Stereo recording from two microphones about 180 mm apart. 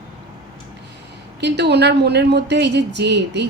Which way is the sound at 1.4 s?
70° right (ahead or behind).